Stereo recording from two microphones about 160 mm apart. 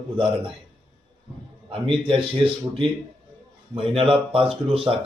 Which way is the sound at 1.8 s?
35° right (ahead or behind).